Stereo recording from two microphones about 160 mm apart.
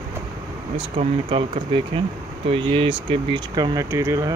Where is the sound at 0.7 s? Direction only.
35° right (ahead or behind).